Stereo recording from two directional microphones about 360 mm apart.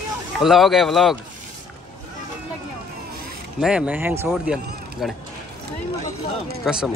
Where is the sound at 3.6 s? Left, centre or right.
Centre.